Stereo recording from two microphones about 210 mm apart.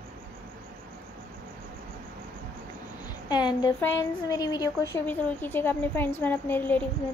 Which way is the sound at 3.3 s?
20° left (ahead or behind).